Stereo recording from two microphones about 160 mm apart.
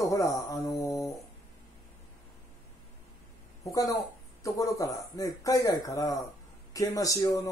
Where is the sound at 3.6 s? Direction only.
20° left (ahead or behind).